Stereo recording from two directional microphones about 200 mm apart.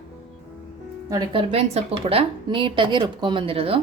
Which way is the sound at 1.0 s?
20° right (ahead or behind).